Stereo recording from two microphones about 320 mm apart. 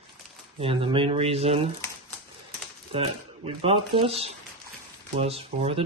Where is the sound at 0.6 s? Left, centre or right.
Centre.